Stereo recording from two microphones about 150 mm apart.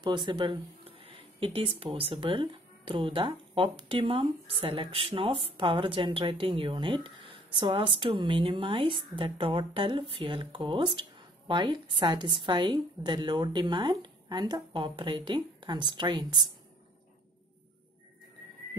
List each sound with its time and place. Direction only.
0.0 s speech: 30° right (ahead or behind)